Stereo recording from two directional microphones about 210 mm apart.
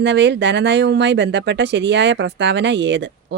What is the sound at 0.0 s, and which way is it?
Speech, 55° right (ahead or behind).